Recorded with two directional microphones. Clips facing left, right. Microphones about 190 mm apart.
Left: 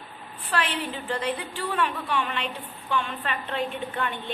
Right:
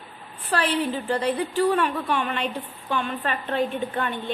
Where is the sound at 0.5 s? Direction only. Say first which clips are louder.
Right 5 dB; 35° right (ahead or behind).